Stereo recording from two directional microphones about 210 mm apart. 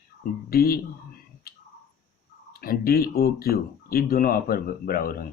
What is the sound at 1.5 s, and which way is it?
Clicking, 45° left (ahead or behind).